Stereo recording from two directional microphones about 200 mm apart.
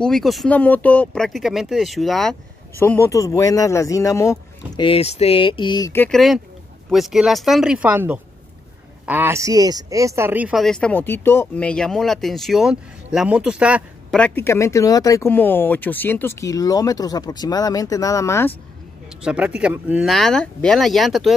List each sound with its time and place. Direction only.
0.0 s speech: centre (ahead or behind)
2.8 s speech: 15° left (ahead or behind)
4.8 s speech: 30° left (ahead or behind)
6.0 s speech: centre (ahead or behind)
14.1 s speech: 10° left (ahead or behind)
19.2 s speech: 5° right (ahead or behind)